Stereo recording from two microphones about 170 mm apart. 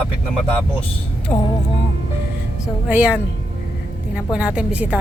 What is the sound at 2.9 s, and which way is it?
A woman's voice, 10° right (ahead or behind).